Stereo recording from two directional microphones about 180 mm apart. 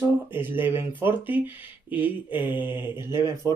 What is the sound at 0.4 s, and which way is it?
Speech, 10° right (ahead or behind).